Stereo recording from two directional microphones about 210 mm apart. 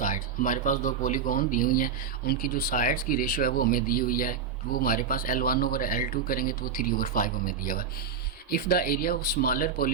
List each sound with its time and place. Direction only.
0.0 s speech: 40° left (ahead or behind)